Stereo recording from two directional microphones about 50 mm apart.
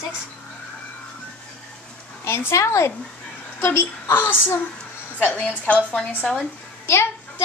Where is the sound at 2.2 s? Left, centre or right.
Left.